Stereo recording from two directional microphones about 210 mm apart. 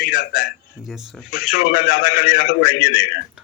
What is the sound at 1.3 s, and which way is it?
A man's voice, 45° left (ahead or behind).